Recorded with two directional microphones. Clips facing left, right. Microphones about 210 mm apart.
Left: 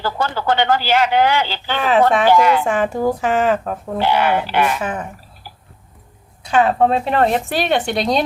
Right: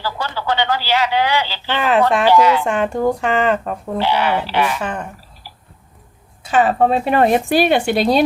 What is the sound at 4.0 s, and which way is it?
Speech, 50° left (ahead or behind).